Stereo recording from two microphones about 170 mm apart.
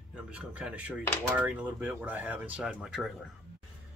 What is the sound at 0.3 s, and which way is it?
Speech, 5° right (ahead or behind).